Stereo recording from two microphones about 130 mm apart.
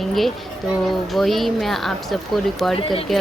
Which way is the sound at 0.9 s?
Centre (ahead or behind).